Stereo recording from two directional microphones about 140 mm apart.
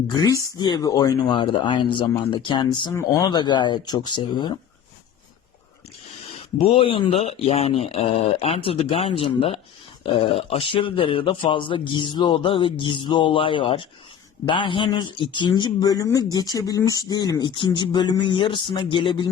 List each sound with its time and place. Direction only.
0.1 s a man's voice: 25° left (ahead or behind)
6.6 s a man's voice: 40° left (ahead or behind)